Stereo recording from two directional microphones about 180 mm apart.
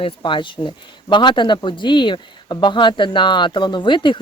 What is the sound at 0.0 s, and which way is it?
Speech, 25° left (ahead or behind).